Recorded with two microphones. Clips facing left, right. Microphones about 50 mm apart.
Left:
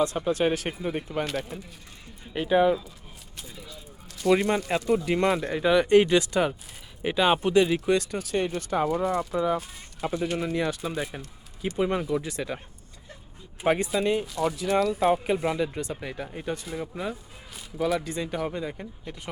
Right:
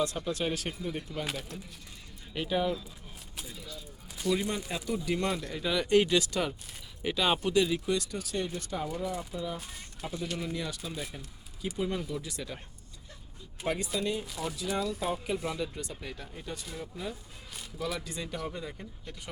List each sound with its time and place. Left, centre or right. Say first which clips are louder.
0.0 s speech: left 7 dB; left
2.3 s speech: left 9 dB; left
3.5 s speech: left 2 dB; centre
4.3 s speech: left 8 dB; left
4.7 s speech: left 8 dB; left
10.2 s speech: left 8 dB; left
13.7 s speech: left 9 dB; left
14.0 s speech: left 7 dB; left
14.3 s speech: left 9 dB; centre
14.7 s speech: left 9 dB; left
15.2 s speech: left 7 dB; left